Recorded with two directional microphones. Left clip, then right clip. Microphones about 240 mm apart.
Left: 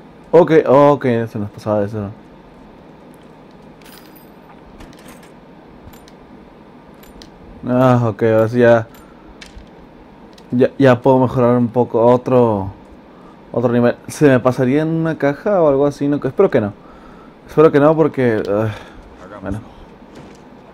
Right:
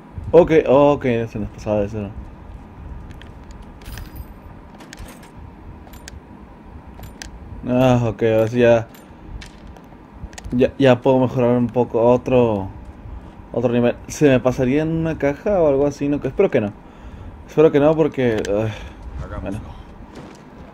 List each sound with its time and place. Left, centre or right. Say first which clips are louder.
0.3 s speech: left 2 dB; left
7.6 s speech: left 3 dB; centre
10.6 s speech: left 3 dB; left